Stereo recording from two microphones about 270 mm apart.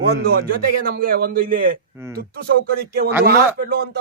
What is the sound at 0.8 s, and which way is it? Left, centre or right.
Speech, right.